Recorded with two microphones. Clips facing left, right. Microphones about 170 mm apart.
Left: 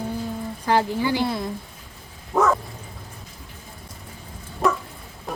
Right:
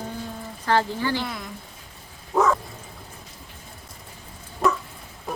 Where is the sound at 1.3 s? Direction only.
30° left (ahead or behind).